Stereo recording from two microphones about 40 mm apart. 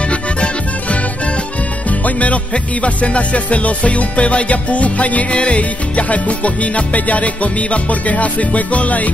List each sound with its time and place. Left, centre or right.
0.1 s music: left